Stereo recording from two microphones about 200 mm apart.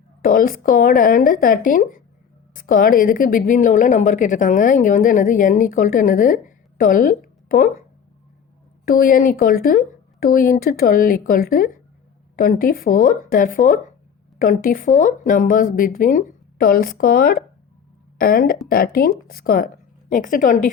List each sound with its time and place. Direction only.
0.2 s a woman's voice: 45° left (ahead or behind)